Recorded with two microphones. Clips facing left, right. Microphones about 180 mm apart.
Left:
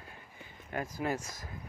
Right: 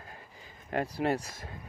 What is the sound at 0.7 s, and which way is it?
Speech, 70° right (ahead or behind).